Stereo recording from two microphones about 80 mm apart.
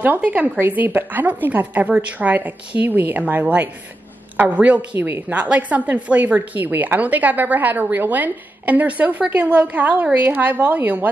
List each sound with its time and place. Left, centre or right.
0.0 s a woman's voice: right